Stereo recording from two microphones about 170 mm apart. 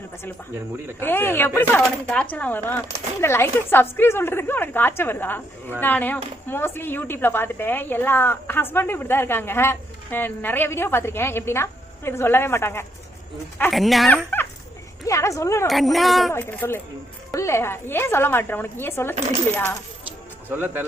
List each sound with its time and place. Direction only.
0.9 s speech: 10° left (ahead or behind)
13.7 s speech: centre (ahead or behind)
15.0 s speech: 20° left (ahead or behind)
15.6 s speech: centre (ahead or behind)
16.3 s speech: 15° left (ahead or behind)
20.5 s a man's voice: 15° right (ahead or behind)